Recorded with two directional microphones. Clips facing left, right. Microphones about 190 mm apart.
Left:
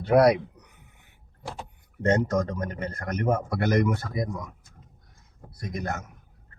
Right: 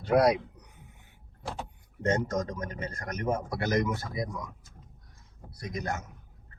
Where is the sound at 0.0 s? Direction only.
60° left (ahead or behind).